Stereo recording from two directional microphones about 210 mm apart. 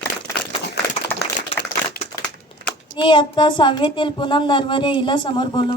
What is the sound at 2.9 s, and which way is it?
Speech, 25° left (ahead or behind).